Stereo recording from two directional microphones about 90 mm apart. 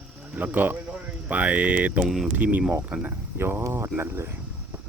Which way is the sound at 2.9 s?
20° right (ahead or behind).